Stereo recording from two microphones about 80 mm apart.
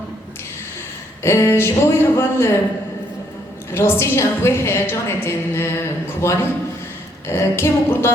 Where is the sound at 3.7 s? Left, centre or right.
Left.